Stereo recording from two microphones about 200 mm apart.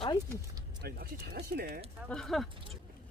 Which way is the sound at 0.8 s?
50° right (ahead or behind).